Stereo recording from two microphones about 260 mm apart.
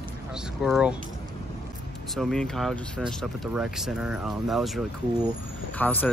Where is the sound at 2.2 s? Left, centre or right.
Centre.